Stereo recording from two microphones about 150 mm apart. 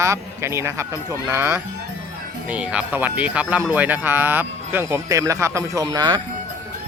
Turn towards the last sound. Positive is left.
turn(degrees=-25)  # may be behind; listen again after turning